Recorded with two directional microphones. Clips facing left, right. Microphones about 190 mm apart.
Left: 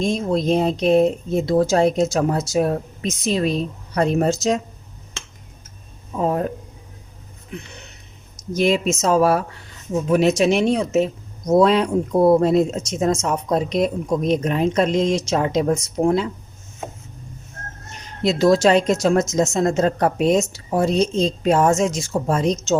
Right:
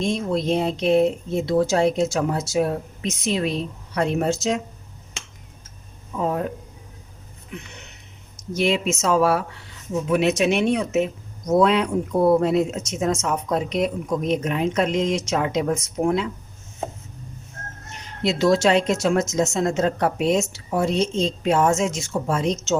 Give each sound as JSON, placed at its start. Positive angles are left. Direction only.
{"t": 0.0, "sound": "speech", "side_deg": 40}
{"t": 6.1, "sound": "speech", "side_deg": 40}
{"t": 8.5, "sound": "speech", "side_deg": 40}
{"t": 18.2, "sound": "speech", "side_deg": 40}